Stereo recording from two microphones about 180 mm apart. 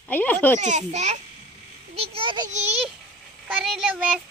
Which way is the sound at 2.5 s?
40° right (ahead or behind).